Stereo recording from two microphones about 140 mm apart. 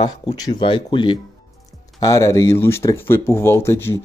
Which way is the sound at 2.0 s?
25° left (ahead or behind).